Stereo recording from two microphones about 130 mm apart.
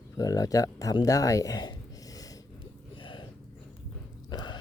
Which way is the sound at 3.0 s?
40° left (ahead or behind).